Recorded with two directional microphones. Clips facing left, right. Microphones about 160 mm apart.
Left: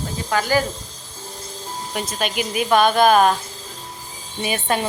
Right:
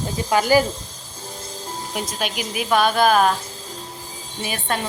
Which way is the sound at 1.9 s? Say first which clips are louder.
Left 3 dB; 5° right (ahead or behind).